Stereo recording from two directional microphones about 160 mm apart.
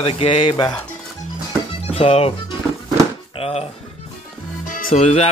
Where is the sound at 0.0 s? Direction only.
35° left (ahead or behind).